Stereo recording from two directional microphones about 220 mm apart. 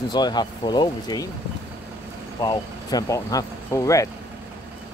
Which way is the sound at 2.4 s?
20° left (ahead or behind).